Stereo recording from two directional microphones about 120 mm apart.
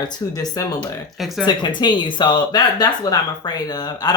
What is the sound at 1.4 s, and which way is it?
Speech, 40° left (ahead or behind).